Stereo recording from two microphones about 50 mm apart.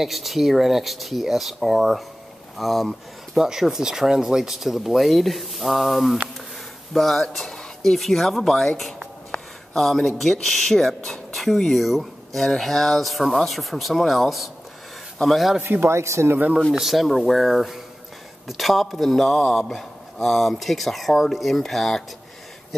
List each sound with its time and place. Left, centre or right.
0.0 s a man's voice: centre
3.4 s a man's voice: centre
15.6 s speech: right
15.9 s speech: right
16.7 s a man's voice: centre